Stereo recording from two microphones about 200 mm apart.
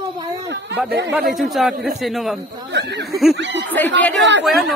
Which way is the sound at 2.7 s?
60° right (ahead or behind).